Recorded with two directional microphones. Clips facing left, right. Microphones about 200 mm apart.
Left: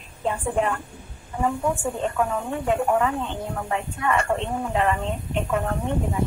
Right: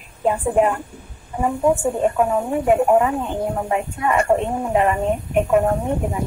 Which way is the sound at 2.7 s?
20° right (ahead or behind).